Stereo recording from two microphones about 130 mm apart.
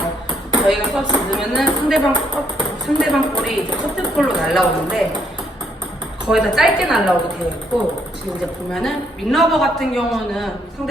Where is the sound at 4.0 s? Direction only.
Centre (ahead or behind).